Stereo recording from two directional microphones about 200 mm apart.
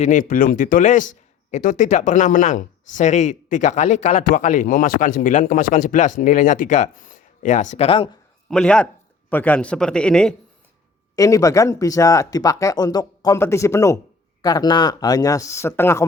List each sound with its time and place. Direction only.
0.0 s speech: 40° left (ahead or behind)
8.4 s speech: 5° left (ahead or behind)
11.1 s speech: 15° left (ahead or behind)